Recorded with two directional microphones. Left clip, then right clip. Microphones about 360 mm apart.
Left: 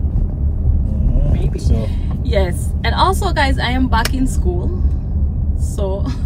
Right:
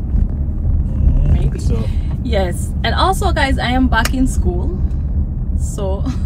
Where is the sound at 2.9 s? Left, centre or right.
Centre.